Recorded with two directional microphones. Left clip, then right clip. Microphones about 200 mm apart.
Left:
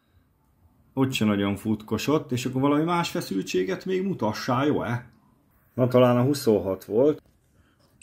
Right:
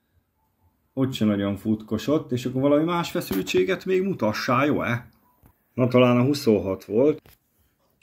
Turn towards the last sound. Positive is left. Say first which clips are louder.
# right 1 dB
turn(degrees=0)  # may be behind; listen again after turning